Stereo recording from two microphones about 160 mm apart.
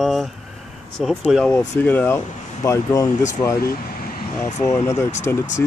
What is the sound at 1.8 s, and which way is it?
Speech, 10° left (ahead or behind).